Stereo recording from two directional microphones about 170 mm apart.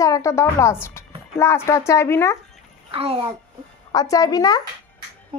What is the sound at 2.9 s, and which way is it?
Speech, 35° right (ahead or behind).